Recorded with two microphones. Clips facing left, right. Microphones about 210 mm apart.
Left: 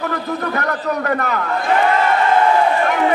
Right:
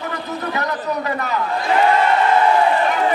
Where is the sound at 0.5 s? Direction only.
55° left (ahead or behind).